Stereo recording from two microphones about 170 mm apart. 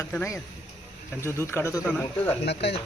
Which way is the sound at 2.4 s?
80° left.